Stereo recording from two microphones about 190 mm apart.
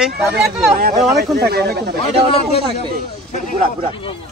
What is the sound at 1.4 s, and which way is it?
Speech, 55° right (ahead or behind).